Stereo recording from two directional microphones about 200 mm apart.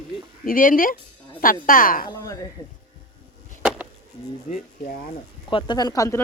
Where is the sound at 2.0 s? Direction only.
15° left (ahead or behind).